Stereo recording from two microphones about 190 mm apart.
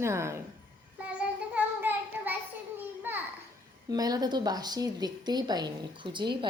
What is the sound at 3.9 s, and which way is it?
A woman's voice, 20° right (ahead or behind).